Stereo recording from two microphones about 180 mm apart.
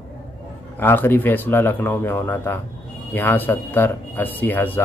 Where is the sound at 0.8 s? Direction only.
10° left (ahead or behind).